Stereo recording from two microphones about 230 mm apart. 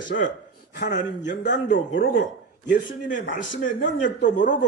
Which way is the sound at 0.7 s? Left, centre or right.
Left.